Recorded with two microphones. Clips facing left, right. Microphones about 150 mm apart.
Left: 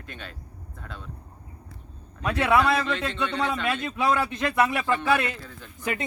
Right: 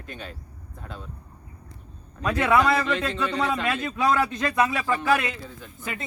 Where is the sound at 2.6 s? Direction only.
Centre (ahead or behind).